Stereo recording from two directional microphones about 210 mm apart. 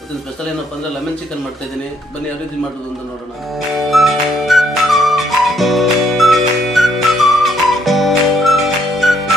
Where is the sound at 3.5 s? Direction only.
Centre (ahead or behind).